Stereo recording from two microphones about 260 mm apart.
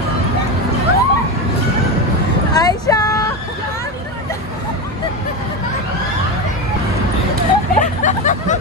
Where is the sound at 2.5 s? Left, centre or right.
Centre.